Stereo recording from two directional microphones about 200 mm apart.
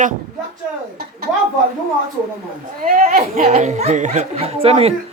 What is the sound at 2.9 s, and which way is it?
Speech, 35° right (ahead or behind).